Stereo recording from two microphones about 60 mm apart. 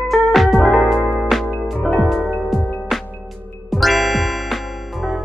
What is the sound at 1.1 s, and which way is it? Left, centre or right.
Music, centre.